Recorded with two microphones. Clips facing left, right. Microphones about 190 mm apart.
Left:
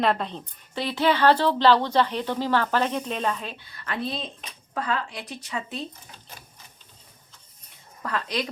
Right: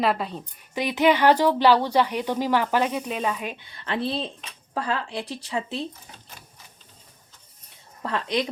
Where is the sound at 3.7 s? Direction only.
25° right (ahead or behind).